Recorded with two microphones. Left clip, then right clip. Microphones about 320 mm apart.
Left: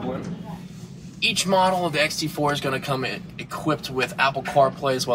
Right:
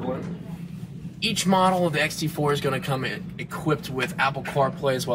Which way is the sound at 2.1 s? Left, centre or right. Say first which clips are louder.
Left 1 dB; centre.